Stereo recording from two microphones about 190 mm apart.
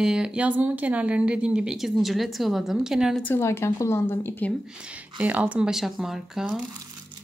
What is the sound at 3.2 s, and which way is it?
Speech, 10° left (ahead or behind).